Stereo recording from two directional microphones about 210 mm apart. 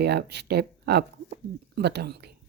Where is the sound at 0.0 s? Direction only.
50° right (ahead or behind).